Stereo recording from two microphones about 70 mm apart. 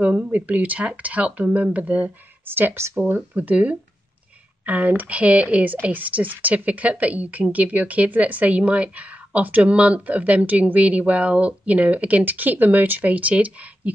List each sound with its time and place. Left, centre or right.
0.0 s speech: centre; by 3.0 s right
3.2 s speech: right